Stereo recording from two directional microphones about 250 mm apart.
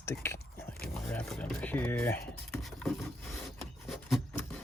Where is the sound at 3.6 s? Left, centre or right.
Centre.